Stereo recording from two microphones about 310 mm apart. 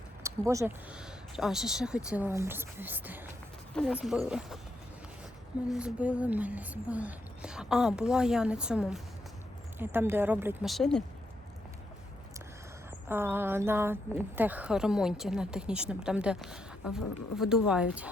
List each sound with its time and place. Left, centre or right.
0.2 s a woman's voice: centre
5.7 s a woman's voice: centre
13.1 s a woman's voice: centre